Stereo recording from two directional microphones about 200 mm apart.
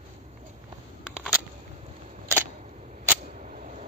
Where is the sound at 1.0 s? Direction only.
5° right (ahead or behind).